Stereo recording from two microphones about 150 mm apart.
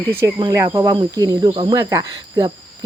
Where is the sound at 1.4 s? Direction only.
35° right (ahead or behind).